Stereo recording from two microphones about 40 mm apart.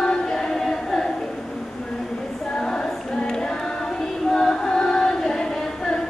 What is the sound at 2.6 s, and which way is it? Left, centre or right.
Music, centre.